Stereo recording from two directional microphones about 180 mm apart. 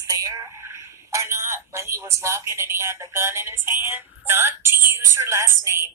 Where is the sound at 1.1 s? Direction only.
15° right (ahead or behind).